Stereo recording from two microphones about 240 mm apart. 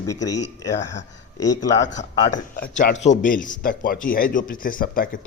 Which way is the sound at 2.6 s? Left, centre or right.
Left.